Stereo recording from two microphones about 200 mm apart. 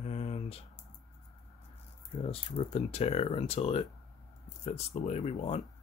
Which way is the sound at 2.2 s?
30° left (ahead or behind).